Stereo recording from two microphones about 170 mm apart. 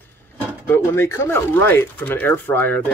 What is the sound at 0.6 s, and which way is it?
Speech, 10° left (ahead or behind).